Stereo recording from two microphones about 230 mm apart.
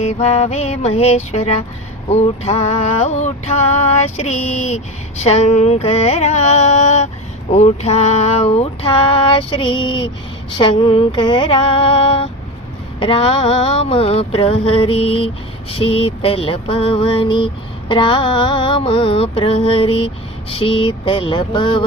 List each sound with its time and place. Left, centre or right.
0.0 s music: left